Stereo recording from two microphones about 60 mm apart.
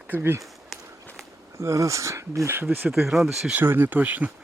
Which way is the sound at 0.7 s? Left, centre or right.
Centre.